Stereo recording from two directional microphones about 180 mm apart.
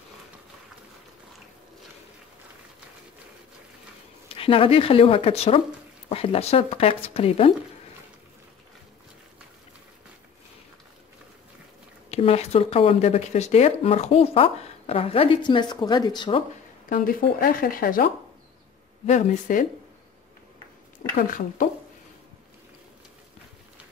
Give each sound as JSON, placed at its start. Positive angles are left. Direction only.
{"t": 4.3, "sound": "speech", "side_deg": 30}
{"t": 12.1, "sound": "speech", "side_deg": 35}
{"t": 16.9, "sound": "speech", "side_deg": 50}
{"t": 21.6, "sound": "speech", "side_deg": 50}